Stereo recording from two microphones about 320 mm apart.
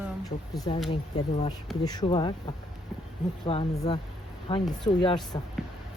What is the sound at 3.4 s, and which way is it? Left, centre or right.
Speech, centre.